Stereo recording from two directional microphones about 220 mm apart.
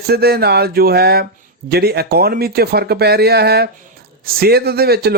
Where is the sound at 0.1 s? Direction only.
45° right (ahead or behind).